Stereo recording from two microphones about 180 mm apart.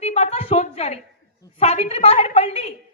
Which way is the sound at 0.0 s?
35° left (ahead or behind).